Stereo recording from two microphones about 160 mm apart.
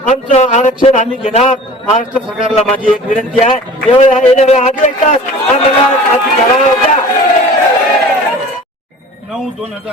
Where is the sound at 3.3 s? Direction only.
40° left (ahead or behind).